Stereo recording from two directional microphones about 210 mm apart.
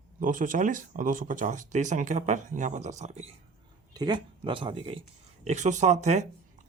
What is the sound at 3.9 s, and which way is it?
Speech, 20° right (ahead or behind).